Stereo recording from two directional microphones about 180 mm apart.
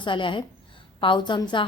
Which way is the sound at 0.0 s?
25° left (ahead or behind).